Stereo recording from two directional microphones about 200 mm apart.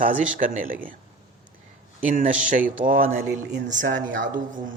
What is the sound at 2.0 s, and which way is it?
A man's voice, 40° right (ahead or behind).